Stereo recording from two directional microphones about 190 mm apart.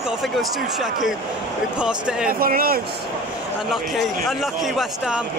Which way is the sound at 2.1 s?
5° right (ahead or behind).